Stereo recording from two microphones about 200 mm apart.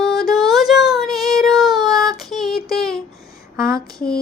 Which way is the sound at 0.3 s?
Centre (ahead or behind).